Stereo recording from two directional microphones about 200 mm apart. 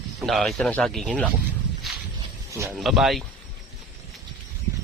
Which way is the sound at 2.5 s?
15° right (ahead or behind).